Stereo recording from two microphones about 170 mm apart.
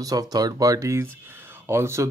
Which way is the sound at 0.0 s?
20° right (ahead or behind).